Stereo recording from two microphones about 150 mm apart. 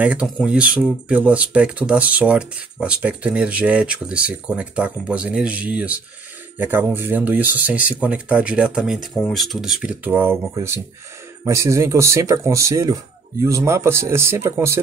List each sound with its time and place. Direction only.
0.0 s speech: 5° right (ahead or behind)